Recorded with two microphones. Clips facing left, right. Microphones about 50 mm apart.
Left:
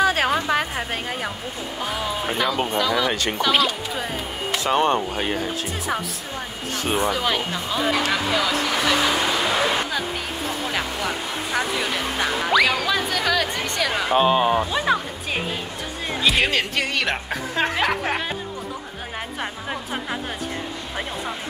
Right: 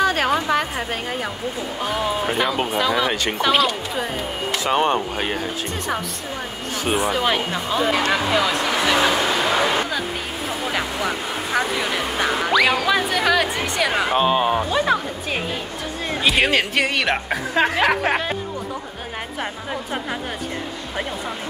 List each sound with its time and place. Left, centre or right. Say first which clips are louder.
0.0 s speech: right 1 dB; centre
2.2 s speech: right 2 dB; centre
3.5 s speech: right 2 dB; centre
4.6 s speech: even; centre
6.8 s speech: right 2 dB; centre
14.4 s speech: right 1 dB; centre
19.7 s speech: right 2 dB; centre